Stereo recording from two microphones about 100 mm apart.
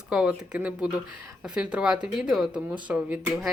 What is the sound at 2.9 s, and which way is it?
Speech, 15° right (ahead or behind).